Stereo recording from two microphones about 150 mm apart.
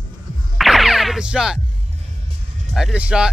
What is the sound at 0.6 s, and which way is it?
Music, centre (ahead or behind).